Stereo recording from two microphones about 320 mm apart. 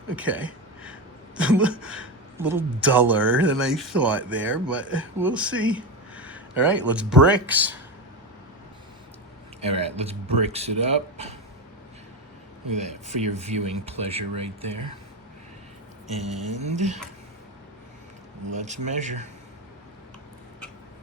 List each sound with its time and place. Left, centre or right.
0.2 s a woman's voice: centre
9.6 s speech: centre
12.7 s speech: right
16.6 s speech: right
18.5 s speech: right